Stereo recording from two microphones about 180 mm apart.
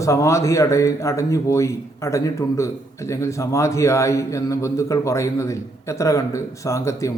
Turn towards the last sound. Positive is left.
turn(degrees=15)  # may be behind; listen again after turning